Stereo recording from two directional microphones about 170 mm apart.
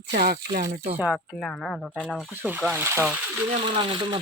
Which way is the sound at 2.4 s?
10° right (ahead or behind).